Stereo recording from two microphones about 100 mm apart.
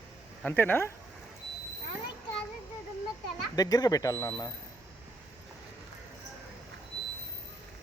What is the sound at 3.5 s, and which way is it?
Speech, 40° left (ahead or behind).